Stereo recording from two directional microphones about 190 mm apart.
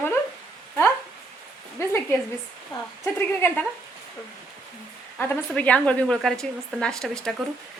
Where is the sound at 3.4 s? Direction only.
10° left (ahead or behind).